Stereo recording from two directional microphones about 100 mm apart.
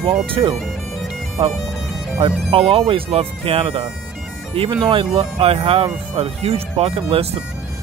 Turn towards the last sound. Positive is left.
turn(degrees=-80)